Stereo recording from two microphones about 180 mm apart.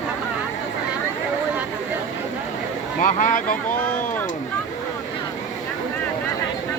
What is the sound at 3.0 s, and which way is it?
Speech, 45° left (ahead or behind).